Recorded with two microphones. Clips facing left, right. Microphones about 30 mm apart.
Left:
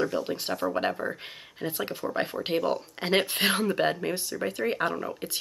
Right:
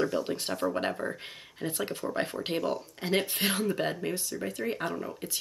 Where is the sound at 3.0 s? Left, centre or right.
Left.